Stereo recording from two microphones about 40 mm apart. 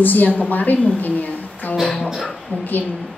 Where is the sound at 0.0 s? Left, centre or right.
Left.